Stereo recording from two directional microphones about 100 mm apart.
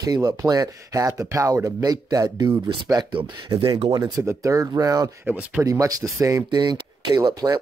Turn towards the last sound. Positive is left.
turn(degrees=-40)  # may be behind; listen again after turning